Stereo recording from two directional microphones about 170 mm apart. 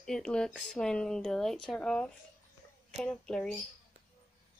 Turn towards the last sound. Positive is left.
turn(degrees=5)  # may be behind; listen again after turning